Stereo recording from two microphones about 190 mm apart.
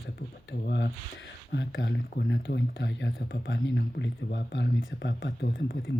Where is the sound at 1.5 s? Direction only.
70° left (ahead or behind).